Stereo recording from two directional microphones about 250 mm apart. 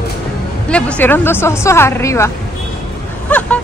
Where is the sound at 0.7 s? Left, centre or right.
Centre.